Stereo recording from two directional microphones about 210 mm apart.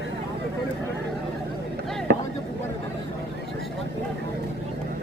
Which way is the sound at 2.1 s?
55° right (ahead or behind).